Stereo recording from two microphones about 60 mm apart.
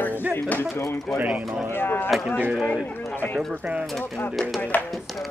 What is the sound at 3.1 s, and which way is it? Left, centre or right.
Speech, left.